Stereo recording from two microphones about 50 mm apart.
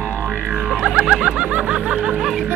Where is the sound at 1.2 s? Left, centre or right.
Right.